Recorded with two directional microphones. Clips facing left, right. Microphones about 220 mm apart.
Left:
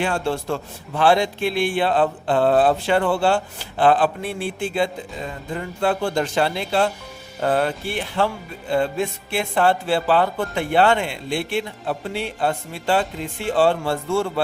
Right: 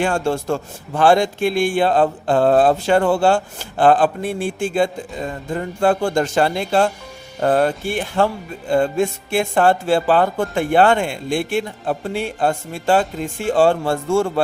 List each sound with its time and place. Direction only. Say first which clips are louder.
0.0 s speech: right 3 dB; 45° right (ahead or behind)